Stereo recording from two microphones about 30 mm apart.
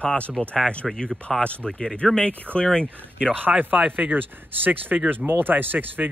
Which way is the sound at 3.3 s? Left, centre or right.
Right.